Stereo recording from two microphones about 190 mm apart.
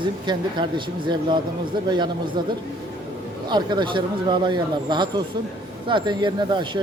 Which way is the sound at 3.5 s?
25° right (ahead or behind).